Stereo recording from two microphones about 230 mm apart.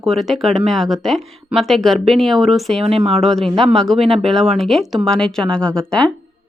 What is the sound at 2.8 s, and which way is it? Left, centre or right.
Speech, right.